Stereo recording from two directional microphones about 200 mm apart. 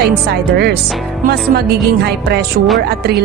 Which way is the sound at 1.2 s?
50° right (ahead or behind).